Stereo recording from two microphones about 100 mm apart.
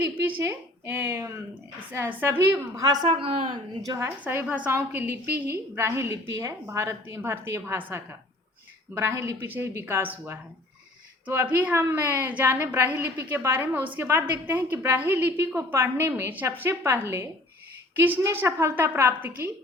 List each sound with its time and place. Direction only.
0.0 s a woman's voice: 20° right (ahead or behind)
2.7 s a woman's voice: 40° right (ahead or behind)
3.1 s a woman's voice: 60° right (ahead or behind)
3.8 s a woman's voice: 30° right (ahead or behind)
4.2 s a woman's voice: 20° right (ahead or behind)
9.2 s a woman's voice: 30° right (ahead or behind)